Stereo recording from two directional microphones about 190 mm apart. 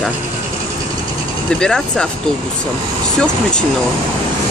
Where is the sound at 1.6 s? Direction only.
5° left (ahead or behind).